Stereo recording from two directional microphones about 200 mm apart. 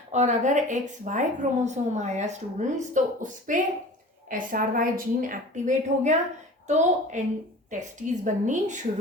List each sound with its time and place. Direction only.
0.1 s a woman's voice: 35° right (ahead or behind)